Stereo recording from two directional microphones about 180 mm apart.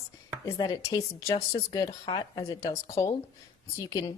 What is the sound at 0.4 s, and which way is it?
Speech, 15° left (ahead or behind).